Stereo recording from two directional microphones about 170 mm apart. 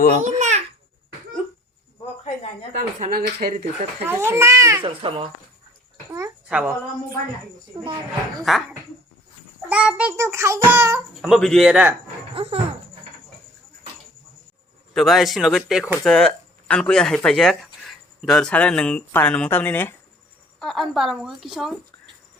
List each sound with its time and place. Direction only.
0.2 s babbling: 45° right (ahead or behind)
2.2 s a sound: 40° left (ahead or behind)
2.7 s speech: 60° right (ahead or behind)
4.0 s child singing: 15° right (ahead or behind)
4.8 s speech: 30° right (ahead or behind)
6.1 s a child's voice: 20° right (ahead or behind)
6.5 s child singing: 5° right (ahead or behind)
8.5 s speech: centre (ahead or behind)
9.6 s child singing: 5° right (ahead or behind)
11.2 s speech: 5° left (ahead or behind)
12.3 s speech: 35° right (ahead or behind)
14.9 s speech: centre (ahead or behind)